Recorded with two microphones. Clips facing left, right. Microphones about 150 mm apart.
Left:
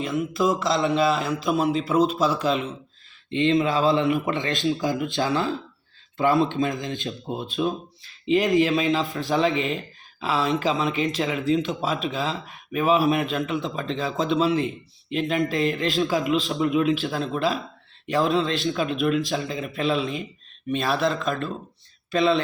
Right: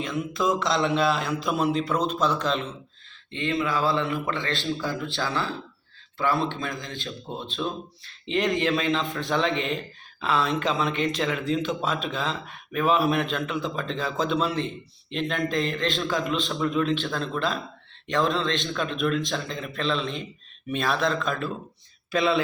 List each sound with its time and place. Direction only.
0.0 s speech: 5° left (ahead or behind)
3.3 s a man's voice: 20° left (ahead or behind); by 22.4 s centre (ahead or behind)